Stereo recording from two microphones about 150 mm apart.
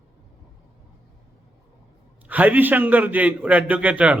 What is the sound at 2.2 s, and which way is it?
A man's voice, 10° right (ahead or behind).